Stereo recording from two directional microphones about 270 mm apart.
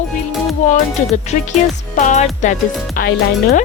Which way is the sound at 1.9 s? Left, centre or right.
Left.